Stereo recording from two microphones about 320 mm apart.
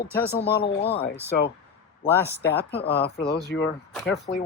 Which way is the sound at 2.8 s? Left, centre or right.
Left.